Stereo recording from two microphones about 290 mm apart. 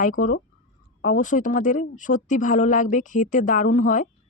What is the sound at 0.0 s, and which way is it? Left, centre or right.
Speech, left.